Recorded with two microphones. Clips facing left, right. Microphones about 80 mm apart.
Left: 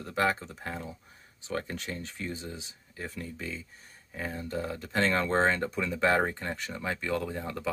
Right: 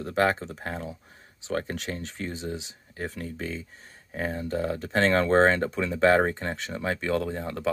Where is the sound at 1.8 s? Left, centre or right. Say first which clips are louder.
Right 4 dB; right.